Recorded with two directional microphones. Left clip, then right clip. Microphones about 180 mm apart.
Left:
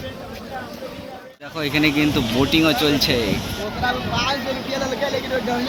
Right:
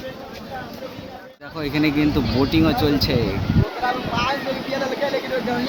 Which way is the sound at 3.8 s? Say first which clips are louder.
Left 1 dB; 40° right (ahead or behind).